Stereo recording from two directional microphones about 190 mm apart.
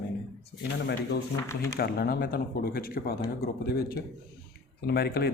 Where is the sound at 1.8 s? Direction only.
55° left (ahead or behind).